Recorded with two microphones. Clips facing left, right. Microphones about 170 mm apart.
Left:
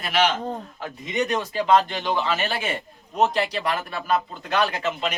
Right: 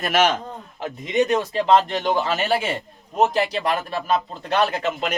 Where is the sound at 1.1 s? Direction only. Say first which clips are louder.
Right 5 dB; 25° right (ahead or behind).